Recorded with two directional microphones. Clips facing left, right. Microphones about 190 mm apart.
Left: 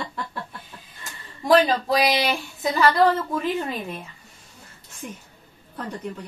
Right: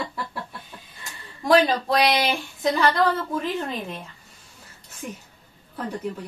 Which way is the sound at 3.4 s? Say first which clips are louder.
Left 2 dB; 5° left (ahead or behind).